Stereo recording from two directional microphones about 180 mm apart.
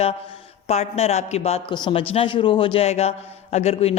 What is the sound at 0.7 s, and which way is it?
A man's voice, 35° left (ahead or behind).